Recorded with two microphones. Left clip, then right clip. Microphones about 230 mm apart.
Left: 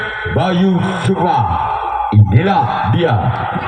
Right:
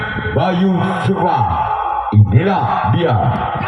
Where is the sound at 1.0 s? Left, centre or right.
Left.